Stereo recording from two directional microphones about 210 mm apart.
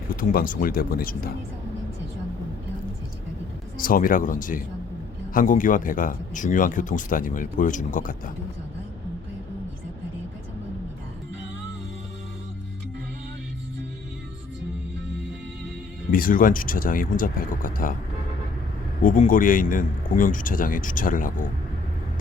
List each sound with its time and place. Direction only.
0.2 s speech: 40° left (ahead or behind)
3.8 s speech: 40° left (ahead or behind)
16.1 s speech: 40° left (ahead or behind)
19.0 s speech: 40° left (ahead or behind)